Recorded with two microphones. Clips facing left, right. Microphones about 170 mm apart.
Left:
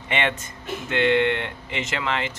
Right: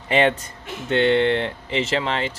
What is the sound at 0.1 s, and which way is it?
Speech, 35° right (ahead or behind).